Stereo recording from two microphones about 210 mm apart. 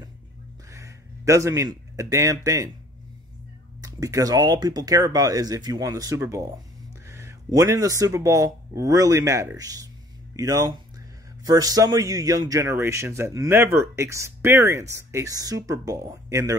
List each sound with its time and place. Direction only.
0.7 s a man's voice: 15° right (ahead or behind)
3.8 s a man's voice: 15° right (ahead or behind)